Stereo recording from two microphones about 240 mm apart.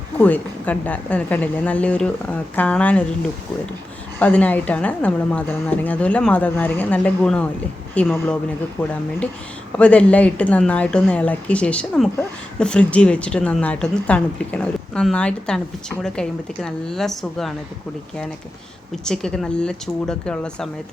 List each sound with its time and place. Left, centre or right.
0.2 s a woman's voice: centre
4.2 s speech: centre
19.0 s speech: centre